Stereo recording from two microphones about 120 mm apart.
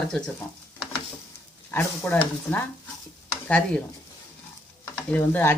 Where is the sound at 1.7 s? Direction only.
15° left (ahead or behind).